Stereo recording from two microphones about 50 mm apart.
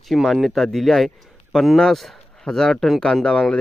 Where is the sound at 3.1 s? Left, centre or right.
Left.